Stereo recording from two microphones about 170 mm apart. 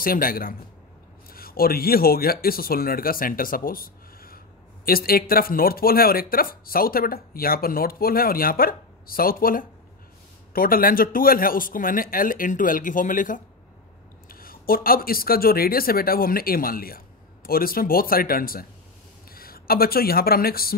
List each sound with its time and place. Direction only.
0.0 s speech: 60° left (ahead or behind)